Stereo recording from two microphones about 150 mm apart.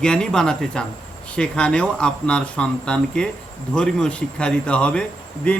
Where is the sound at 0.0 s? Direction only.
5° left (ahead or behind).